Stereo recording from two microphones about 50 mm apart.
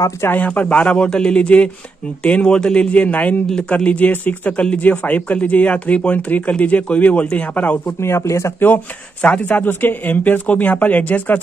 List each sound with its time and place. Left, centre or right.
0.2 s speech: left
0.6 s speech: left
8.0 s speech: left
8.5 s speech: left
9.2 s speech: left
9.5 s speech: left